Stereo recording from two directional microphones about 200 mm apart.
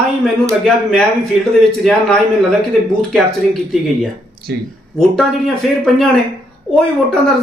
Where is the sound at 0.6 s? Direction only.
5° left (ahead or behind).